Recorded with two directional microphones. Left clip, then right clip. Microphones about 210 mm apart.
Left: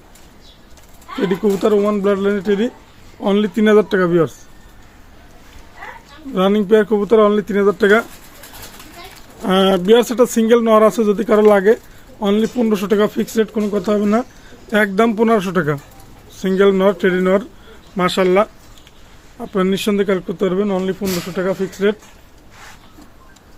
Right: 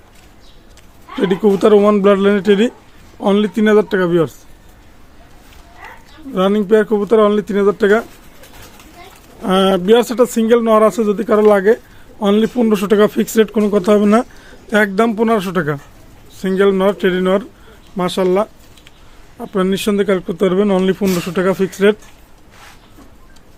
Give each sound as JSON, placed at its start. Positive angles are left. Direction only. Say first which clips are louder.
{"t": 1.2, "sound": "speech", "louder": "right 4 dB", "side_deg": -25}
{"t": 3.2, "sound": "a man's voice", "louder": "right 2 dB", "side_deg": -15}
{"t": 6.3, "sound": "a man's voice", "louder": "right 1 dB", "side_deg": -5}
{"t": 9.4, "sound": "a man's voice", "louder": "right 1 dB", "side_deg": -10}
{"t": 12.2, "sound": "speech", "louder": "right 3 dB", "side_deg": -20}
{"t": 14.7, "sound": "a man's voice", "louder": "right 1 dB", "side_deg": -10}